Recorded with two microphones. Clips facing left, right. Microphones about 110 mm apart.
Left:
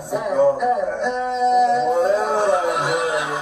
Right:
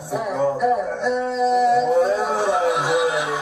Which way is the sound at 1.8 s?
Centre (ahead or behind).